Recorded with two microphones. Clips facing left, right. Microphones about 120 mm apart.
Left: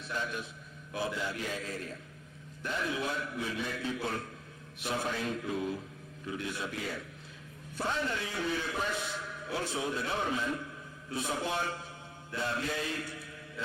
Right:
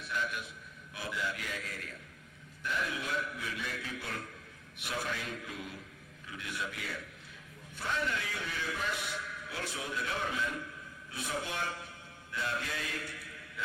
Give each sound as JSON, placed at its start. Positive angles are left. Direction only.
{"t": 0.1, "sound": "music", "side_deg": 30}
{"t": 0.9, "sound": "a man's voice", "side_deg": 30}
{"t": 6.2, "sound": "music", "side_deg": 30}
{"t": 7.8, "sound": "a man's voice", "side_deg": 30}
{"t": 12.3, "sound": "music", "side_deg": 30}